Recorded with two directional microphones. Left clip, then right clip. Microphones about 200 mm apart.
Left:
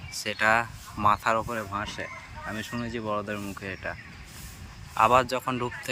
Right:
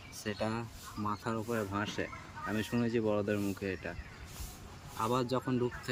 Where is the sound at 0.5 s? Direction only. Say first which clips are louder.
Left 16 dB; 35° left (ahead or behind).